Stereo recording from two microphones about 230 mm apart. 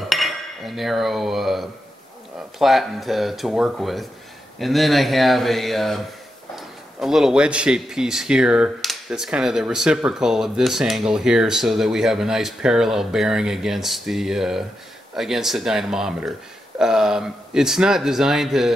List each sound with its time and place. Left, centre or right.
0.1 s cutlery: centre
2.6 s a man's voice: centre